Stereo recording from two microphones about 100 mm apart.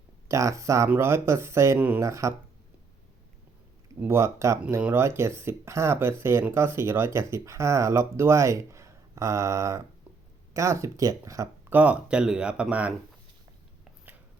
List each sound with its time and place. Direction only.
0.3 s speech: 30° right (ahead or behind)
4.0 s speech: 30° right (ahead or behind)
11.7 s speech: 15° right (ahead or behind)